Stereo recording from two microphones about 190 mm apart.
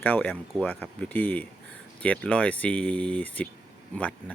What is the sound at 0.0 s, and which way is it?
Speech, 10° left (ahead or behind).